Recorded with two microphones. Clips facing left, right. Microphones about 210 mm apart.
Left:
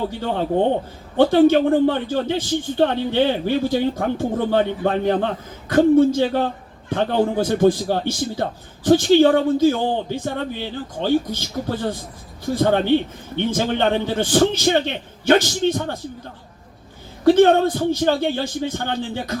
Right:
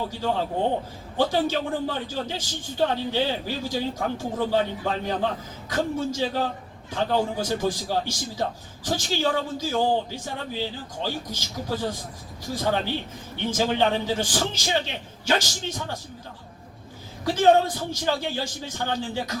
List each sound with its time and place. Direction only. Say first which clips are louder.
0.1 s a man's voice: left 5 dB; 60° left (ahead or behind)
17.2 s a man's voice: left 6 dB; 60° left (ahead or behind)